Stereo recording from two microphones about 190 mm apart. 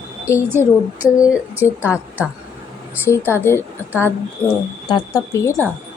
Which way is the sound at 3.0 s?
15° left (ahead or behind).